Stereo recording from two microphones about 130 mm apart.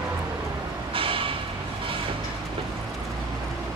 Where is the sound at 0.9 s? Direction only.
45° right (ahead or behind).